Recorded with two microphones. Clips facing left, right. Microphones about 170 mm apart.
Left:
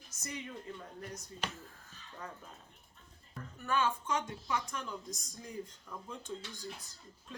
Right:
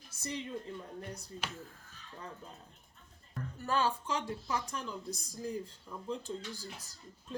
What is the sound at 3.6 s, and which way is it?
Speech, 35° right (ahead or behind).